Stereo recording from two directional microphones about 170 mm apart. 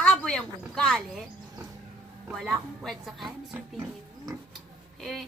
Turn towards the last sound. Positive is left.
turn(degrees=0)  # may be behind; listen again after turning